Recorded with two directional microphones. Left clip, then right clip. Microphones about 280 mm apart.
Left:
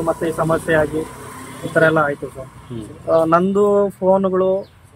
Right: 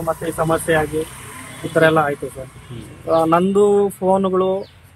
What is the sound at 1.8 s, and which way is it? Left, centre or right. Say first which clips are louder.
Speech: even; centre.